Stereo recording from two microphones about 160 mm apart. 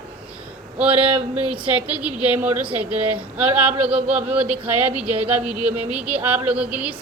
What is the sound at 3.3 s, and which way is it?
A woman's voice, 10° right (ahead or behind).